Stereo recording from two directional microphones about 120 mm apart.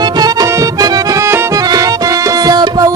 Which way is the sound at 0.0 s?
35° right (ahead or behind).